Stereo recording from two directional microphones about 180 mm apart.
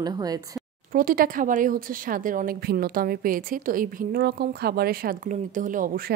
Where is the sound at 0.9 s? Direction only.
50° right (ahead or behind).